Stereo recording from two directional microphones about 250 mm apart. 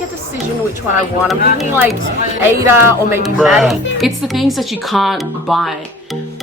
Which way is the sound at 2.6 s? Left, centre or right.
Centre.